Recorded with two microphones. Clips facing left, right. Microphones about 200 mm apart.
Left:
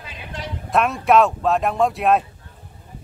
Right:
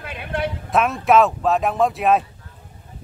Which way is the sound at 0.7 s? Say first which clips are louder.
Left 1 dB; centre (ahead or behind).